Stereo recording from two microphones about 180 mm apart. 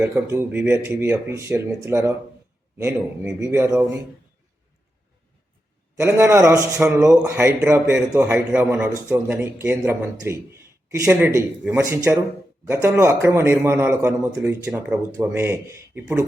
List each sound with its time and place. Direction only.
0.0 s speech: 15° right (ahead or behind)
6.0 s speech: 15° right (ahead or behind)